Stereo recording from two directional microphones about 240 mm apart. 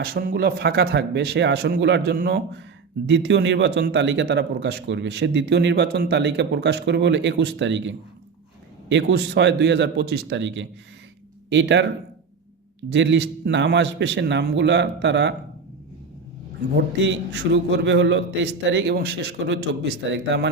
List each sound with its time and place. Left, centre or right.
0.0 s a man's voice: right
12.9 s a man's voice: right
16.7 s a man's voice: right